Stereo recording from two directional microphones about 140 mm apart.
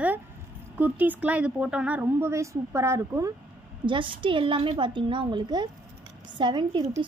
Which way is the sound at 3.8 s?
35° right (ahead or behind).